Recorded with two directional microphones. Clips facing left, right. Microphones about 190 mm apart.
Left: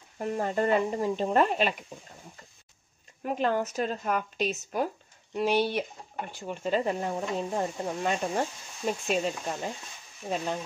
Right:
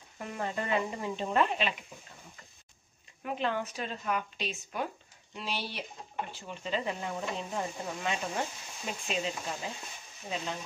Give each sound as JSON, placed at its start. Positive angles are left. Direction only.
{"t": 0.2, "sound": "speech", "side_deg": 40}
{"t": 3.3, "sound": "speech", "side_deg": 45}